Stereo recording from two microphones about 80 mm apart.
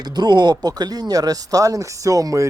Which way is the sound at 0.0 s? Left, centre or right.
Right.